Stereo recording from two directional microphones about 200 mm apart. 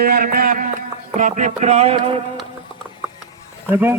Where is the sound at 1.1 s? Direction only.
40° right (ahead or behind).